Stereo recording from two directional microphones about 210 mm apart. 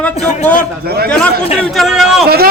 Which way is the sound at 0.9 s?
50° right (ahead or behind).